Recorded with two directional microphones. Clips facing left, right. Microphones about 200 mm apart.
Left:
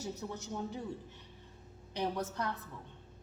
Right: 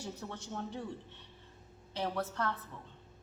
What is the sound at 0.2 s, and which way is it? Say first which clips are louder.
Speech: left 2 dB; 10° left (ahead or behind).